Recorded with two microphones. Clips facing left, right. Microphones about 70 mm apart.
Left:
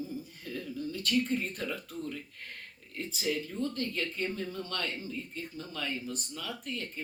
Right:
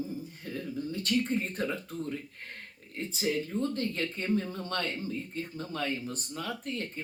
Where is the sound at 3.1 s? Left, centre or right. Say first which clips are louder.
Right 3 dB; right.